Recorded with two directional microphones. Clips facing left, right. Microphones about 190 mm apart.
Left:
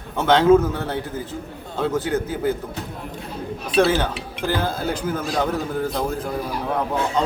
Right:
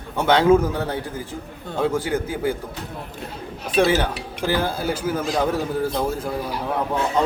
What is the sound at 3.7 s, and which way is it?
A man's voice, 10° right (ahead or behind).